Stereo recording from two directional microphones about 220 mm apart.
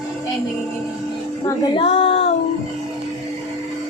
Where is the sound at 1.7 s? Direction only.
25° left (ahead or behind).